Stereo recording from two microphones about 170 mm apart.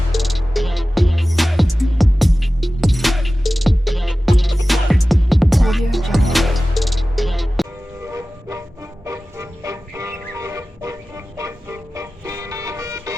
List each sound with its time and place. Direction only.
0.1 s music: centre (ahead or behind)
8.0 s music: 20° right (ahead or behind)